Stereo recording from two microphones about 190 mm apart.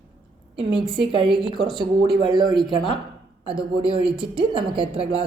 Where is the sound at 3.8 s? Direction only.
25° right (ahead or behind).